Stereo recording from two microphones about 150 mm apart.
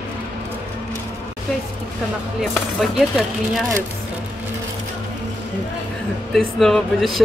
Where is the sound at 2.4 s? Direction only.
5° right (ahead or behind).